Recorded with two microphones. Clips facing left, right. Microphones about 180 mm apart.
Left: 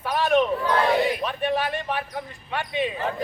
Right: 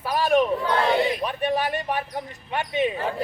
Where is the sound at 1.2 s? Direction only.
15° right (ahead or behind).